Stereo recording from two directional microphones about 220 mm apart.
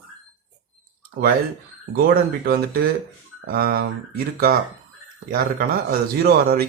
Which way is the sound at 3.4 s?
45° right (ahead or behind).